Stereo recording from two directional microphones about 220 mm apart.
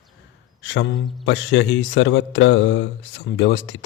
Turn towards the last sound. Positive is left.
turn(degrees=55)  # may be behind; listen again after turning